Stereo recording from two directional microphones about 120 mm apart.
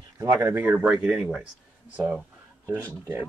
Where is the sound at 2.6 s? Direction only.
20° right (ahead or behind).